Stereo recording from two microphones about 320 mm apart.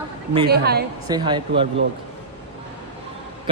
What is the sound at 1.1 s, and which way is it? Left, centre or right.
Speech, centre.